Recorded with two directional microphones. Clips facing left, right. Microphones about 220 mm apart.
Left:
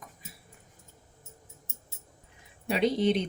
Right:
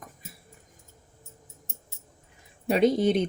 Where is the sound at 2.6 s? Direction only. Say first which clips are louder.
Right 4 dB; 45° right (ahead or behind).